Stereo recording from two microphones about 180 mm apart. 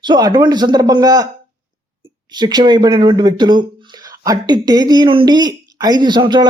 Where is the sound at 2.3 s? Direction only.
25° right (ahead or behind).